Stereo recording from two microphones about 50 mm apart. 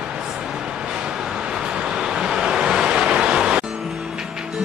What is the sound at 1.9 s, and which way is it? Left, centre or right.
Music, centre.